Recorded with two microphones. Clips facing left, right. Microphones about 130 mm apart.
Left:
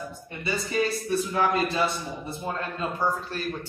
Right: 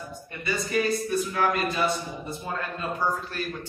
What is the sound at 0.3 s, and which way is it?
A man's voice, 25° left (ahead or behind).